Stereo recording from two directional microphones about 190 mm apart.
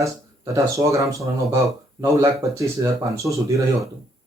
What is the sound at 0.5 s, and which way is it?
Speech, 15° right (ahead or behind).